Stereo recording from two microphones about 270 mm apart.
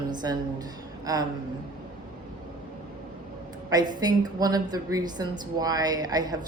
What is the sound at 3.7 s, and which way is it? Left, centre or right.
Speech, centre.